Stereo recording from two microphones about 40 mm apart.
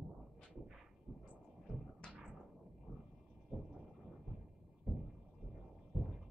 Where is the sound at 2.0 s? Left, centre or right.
Centre.